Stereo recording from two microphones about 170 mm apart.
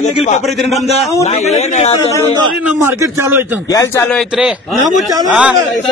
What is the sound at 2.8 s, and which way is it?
Speech, 15° right (ahead or behind).